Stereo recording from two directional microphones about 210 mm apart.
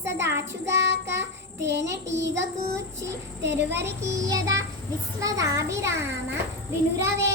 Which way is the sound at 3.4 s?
55° right (ahead or behind).